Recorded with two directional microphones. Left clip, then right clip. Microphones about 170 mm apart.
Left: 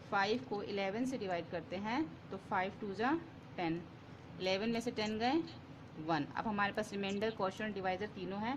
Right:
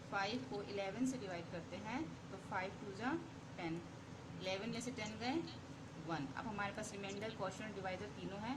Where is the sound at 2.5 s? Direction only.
60° left (ahead or behind).